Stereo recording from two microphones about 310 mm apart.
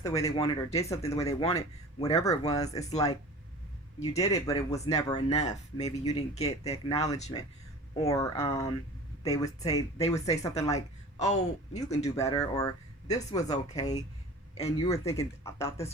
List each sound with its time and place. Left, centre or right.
0.0 s speech: centre
5.1 s speech: left
7.9 s speech: centre
10.7 s speech: left
12.1 s speech: centre